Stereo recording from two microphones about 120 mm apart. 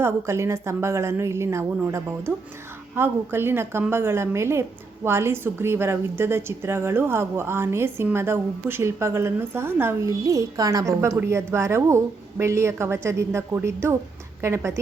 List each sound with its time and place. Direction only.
0.0 s a woman's voice: 20° right (ahead or behind)
10.1 s a woman's voice: 30° right (ahead or behind)